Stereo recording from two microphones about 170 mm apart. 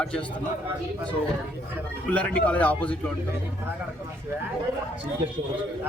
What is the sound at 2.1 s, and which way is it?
Speech, 10° left (ahead or behind).